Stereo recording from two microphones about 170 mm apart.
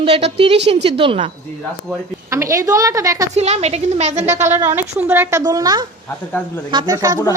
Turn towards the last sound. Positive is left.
turn(degrees=-20)  # may be behind; listen again after turning